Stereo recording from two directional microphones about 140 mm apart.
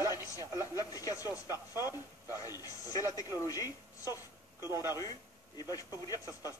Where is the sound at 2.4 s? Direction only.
25° left (ahead or behind).